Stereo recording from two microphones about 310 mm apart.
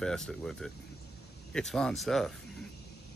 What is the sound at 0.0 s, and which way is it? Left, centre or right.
Speech, centre.